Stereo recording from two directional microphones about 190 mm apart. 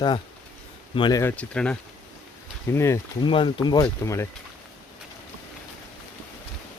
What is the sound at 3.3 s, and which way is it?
Speech, 25° left (ahead or behind).